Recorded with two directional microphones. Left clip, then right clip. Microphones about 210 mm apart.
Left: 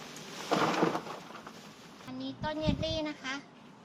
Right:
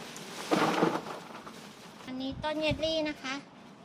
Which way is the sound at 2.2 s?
20° right (ahead or behind).